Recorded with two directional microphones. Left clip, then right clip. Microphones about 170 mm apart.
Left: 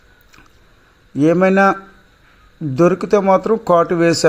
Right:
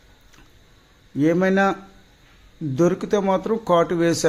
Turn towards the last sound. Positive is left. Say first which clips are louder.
# left 5 dB
turn(degrees=15)  # may be behind; listen again after turning